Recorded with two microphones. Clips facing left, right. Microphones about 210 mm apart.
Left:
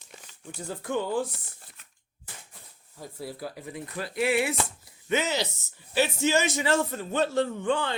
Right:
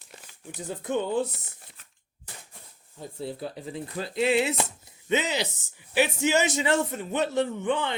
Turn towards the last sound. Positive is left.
turn(degrees=-20)  # may be behind; listen again after turning